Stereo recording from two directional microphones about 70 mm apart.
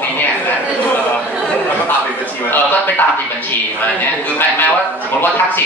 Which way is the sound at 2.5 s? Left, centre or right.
Left.